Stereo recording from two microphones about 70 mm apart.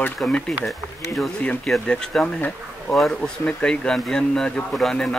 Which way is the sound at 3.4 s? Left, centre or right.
Centre.